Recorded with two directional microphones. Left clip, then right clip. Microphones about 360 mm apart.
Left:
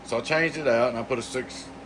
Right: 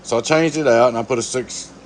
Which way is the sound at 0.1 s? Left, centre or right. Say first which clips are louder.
Right 8 dB; centre.